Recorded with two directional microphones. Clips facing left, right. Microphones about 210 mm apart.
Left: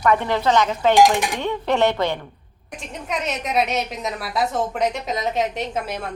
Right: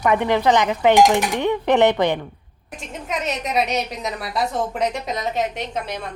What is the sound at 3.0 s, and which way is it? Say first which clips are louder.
A woman's voice: right 1 dB; centre (ahead or behind).